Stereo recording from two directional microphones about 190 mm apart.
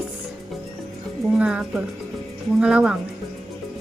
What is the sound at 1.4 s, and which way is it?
A woman's voice, 5° right (ahead or behind).